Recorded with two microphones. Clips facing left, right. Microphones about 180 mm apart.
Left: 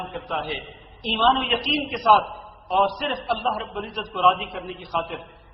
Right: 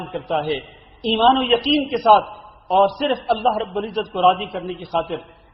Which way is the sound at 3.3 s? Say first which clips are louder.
Right 6 dB; 35° right (ahead or behind).